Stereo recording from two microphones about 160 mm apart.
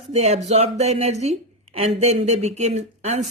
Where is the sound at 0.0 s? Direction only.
40° right (ahead or behind).